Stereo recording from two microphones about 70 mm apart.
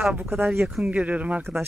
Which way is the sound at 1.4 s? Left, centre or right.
Right.